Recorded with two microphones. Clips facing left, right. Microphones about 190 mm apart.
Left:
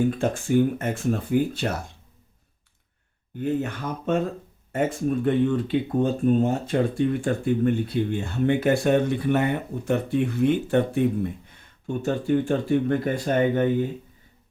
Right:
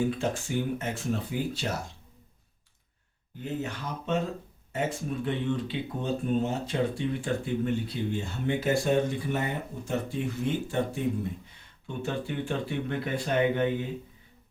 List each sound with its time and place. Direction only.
0.1 s speech: 50° left (ahead or behind)
3.4 s speech: 55° left (ahead or behind)
12.0 s speech: 45° left (ahead or behind)